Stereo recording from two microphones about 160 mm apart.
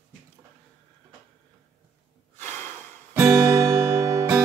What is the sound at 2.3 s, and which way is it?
Snort, 15° left (ahead or behind).